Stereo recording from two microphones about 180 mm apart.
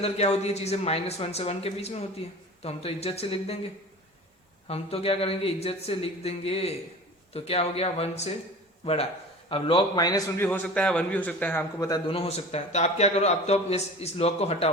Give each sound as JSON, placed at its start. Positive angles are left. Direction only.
{"t": 0.0, "sound": "a man's voice", "side_deg": 35}
{"t": 4.7, "sound": "a man's voice", "side_deg": 35}
{"t": 12.1, "sound": "a man's voice", "side_deg": 35}